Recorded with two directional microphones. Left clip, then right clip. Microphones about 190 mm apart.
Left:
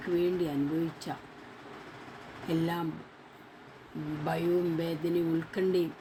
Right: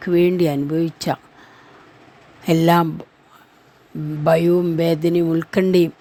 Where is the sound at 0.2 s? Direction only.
60° right (ahead or behind).